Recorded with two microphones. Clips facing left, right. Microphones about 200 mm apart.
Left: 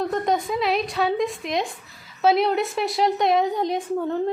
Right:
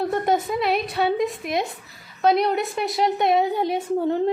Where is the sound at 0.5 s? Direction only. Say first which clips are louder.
Even; centre (ahead or behind).